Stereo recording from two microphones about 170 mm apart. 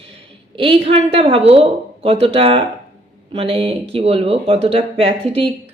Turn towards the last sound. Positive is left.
turn(degrees=-35)  # may be behind; listen again after turning